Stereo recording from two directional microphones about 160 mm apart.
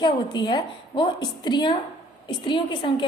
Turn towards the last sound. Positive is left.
turn(degrees=30)  # may be behind; listen again after turning